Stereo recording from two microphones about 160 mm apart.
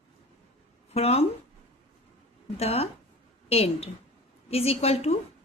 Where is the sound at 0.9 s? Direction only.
40° left (ahead or behind).